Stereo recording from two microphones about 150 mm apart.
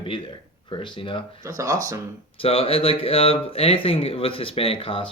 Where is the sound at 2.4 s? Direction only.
40° left (ahead or behind).